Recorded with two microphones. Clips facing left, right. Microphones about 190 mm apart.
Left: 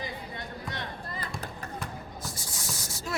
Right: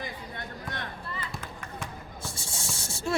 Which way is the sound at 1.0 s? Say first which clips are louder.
Even; 40° left (ahead or behind).